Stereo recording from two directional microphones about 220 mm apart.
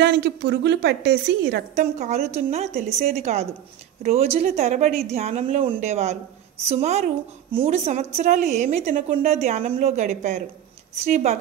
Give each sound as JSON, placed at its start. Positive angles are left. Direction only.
{"t": 0.0, "sound": "a woman's voice", "side_deg": -50}
{"t": 1.8, "sound": "a woman's voice", "side_deg": -30}